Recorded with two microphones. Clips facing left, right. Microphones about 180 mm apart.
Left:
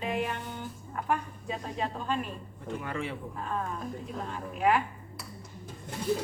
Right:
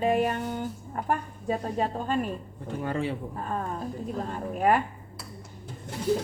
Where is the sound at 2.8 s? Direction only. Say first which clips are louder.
Right 8 dB; 35° right (ahead or behind).